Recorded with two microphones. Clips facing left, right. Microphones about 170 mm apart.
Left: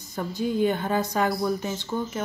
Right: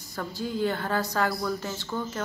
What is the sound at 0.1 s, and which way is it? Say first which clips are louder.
A woman's voice: left 5 dB; 20° left (ahead or behind).